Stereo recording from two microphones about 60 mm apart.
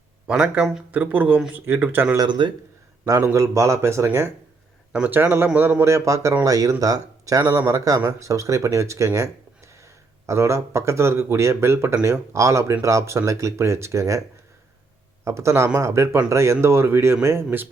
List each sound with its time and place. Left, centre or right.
0.3 s speech: centre
0.9 s speech: right
3.3 s speech: right
5.0 s speech: right
5.8 s speech: right
6.4 s speech: right